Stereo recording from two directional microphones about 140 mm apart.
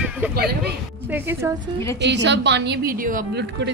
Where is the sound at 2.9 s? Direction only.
80° right.